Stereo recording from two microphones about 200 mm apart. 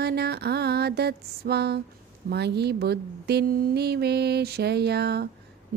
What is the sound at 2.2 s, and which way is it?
Speech, 55° right (ahead or behind).